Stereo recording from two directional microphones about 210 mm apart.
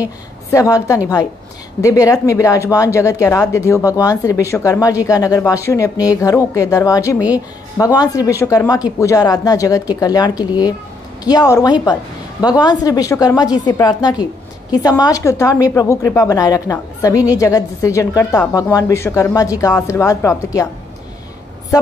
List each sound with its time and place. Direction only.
0.5 s a woman's voice: 15° left (ahead or behind)